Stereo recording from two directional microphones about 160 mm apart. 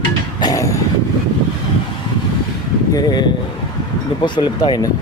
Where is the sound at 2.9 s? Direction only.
25° left (ahead or behind).